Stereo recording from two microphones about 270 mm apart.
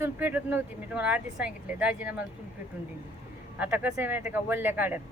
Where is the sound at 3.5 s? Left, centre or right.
Centre.